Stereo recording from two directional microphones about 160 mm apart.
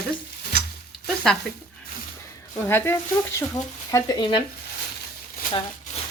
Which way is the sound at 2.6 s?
15° left (ahead or behind).